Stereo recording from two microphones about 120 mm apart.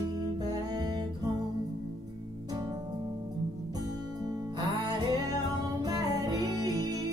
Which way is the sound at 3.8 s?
35° right (ahead or behind).